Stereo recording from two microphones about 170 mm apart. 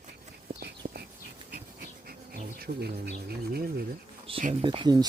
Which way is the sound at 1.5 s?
70° right (ahead or behind).